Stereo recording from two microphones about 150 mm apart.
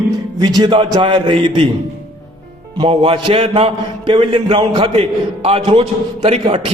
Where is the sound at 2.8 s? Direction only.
35° right (ahead or behind).